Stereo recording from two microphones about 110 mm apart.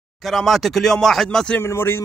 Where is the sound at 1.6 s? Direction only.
20° left (ahead or behind).